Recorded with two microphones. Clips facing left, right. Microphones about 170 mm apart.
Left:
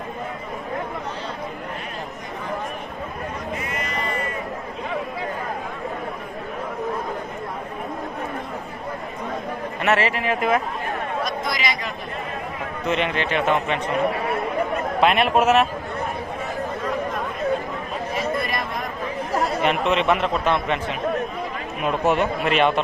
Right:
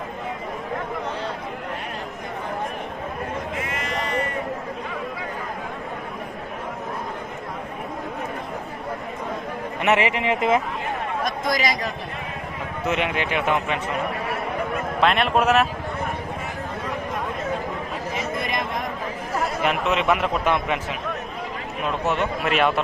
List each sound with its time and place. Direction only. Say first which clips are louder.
3.6 s sheep: even; 90° right
9.8 s speech: right 1 dB; 15° right (ahead or behind)
11.2 s a sound: right 5 dB; 45° right (ahead or behind)
12.8 s a man's voice: left 1 dB; 5° right (ahead or behind)
15.0 s a man's voice: left 2 dB; 5° left (ahead or behind)
18.1 s chatter: left 3 dB; 20° right (ahead or behind)
19.6 s a man's voice: left 1 dB; 5° right (ahead or behind)
22.0 s a man's voice: left 4 dB; 15° left (ahead or behind)
22.4 s a man's voice: left 1 dB; 5° right (ahead or behind)